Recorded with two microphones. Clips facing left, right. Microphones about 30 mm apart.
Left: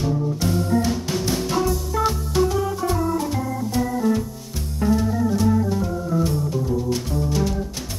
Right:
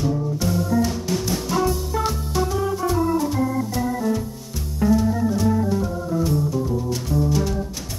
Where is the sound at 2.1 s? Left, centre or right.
Centre.